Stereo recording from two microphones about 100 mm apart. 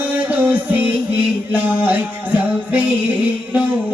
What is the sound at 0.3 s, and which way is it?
Music, 15° right (ahead or behind).